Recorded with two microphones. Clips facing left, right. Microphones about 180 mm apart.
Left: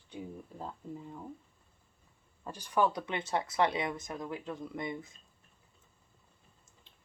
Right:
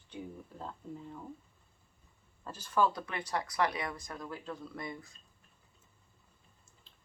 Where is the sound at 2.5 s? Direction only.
15° left (ahead or behind).